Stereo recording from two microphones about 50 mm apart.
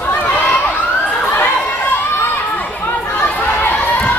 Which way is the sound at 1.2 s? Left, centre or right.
Left.